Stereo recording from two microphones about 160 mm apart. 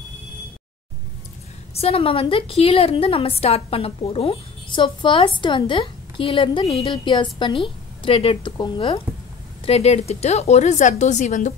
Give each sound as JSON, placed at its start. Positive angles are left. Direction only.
{"t": 1.7, "sound": "a woman's voice", "side_deg": 40}